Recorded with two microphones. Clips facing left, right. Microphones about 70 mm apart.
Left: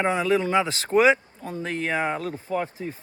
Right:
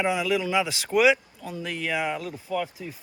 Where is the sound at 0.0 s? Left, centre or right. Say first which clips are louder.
Left 3 dB; left.